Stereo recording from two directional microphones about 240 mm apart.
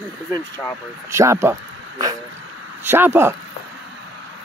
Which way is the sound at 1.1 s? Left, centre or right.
Centre.